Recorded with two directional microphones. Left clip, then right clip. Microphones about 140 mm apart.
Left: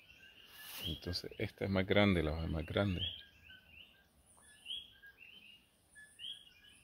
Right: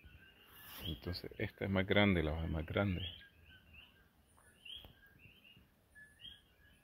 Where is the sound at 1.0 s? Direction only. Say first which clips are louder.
Left 2 dB; 20° left (ahead or behind).